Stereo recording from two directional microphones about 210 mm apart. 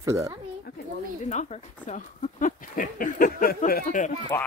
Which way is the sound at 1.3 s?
35° left (ahead or behind).